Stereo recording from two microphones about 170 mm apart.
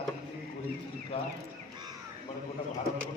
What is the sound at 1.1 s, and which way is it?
Speech, 35° left (ahead or behind).